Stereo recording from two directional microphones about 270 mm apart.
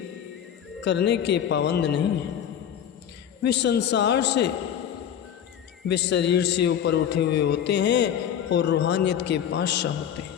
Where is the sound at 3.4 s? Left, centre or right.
Left.